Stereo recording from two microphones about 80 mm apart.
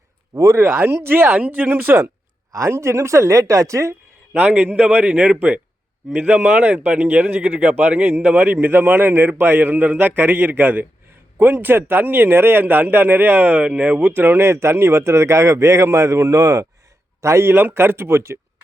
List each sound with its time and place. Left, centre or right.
0.3 s a woman's voice: right
2.5 s a woman's voice: right
4.3 s a man's voice: centre; by 17.5 s right
17.5 s a man's voice: right